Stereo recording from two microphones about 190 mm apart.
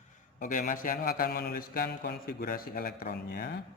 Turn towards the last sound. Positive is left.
turn(degrees=50)  # may be behind; listen again after turning